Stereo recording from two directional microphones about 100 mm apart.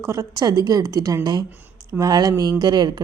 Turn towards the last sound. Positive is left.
turn(degrees=-45)  # may be behind; listen again after turning